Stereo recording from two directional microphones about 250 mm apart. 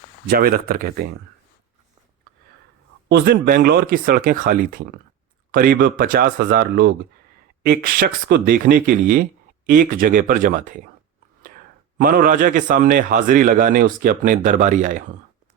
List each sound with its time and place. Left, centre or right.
0.3 s a man's voice: right
3.1 s a man's voice: right